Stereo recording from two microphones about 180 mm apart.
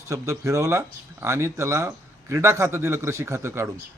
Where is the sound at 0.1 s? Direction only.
15° right (ahead or behind).